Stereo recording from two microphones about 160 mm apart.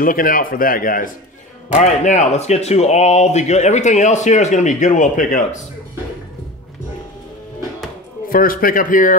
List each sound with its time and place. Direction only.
0.0 s speech: 60° left (ahead or behind)
1.7 s speech: 45° left (ahead or behind)
8.3 s speech: 60° left (ahead or behind)